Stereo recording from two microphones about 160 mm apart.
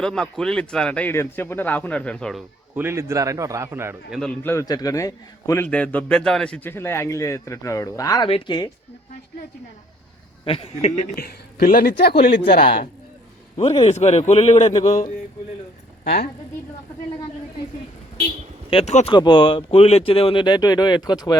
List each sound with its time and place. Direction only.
0.0 s a man's voice: 5° left (ahead or behind)
2.7 s a man's voice: 15° right (ahead or behind)
4.1 s a man's voice: 5° left (ahead or behind)
4.5 s speech: 25° left (ahead or behind)
5.6 s a man's voice: 10° left (ahead or behind); by 8.7 s 30° left (ahead or behind)
10.4 s speech: 35° left (ahead or behind)
11.2 s speech: 75° left (ahead or behind)
13.6 s a man's voice: 35° left (ahead or behind)
16.0 s speech: 75° left (ahead or behind)
18.7 s speech: 40° left (ahead or behind)
19.1 s speech: 30° left (ahead or behind)